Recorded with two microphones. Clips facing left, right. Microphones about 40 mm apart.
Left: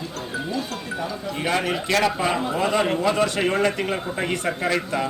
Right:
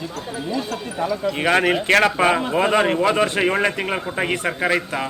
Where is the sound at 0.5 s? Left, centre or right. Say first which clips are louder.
Right 3 dB; right.